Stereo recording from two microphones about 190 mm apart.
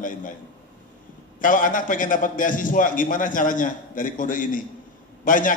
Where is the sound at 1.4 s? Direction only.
45° left (ahead or behind).